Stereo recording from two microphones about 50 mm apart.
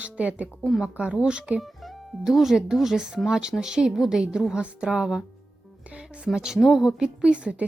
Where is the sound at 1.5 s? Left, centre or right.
Centre.